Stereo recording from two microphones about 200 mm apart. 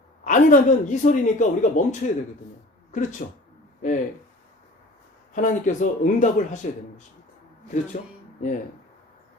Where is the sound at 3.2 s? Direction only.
40° left (ahead or behind).